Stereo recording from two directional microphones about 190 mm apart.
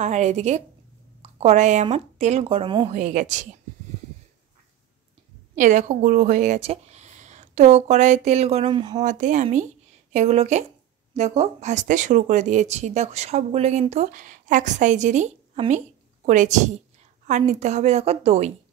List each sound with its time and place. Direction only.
0.0 s speech: 40° right (ahead or behind)
2.9 s speech: 40° right (ahead or behind)
5.6 s speech: 40° right (ahead or behind); by 9.0 s 25° right (ahead or behind)
9.0 s speech: 40° right (ahead or behind)